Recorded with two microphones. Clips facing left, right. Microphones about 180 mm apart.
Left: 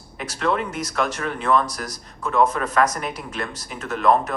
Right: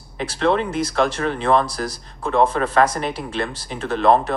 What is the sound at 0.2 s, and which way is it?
Speech, 30° right (ahead or behind).